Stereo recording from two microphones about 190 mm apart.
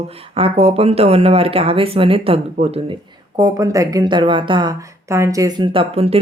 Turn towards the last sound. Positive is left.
turn(degrees=-30)  # may be behind; listen again after turning